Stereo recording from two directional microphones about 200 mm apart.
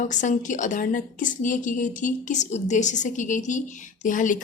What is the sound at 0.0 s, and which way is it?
A woman's voice, 40° left (ahead or behind).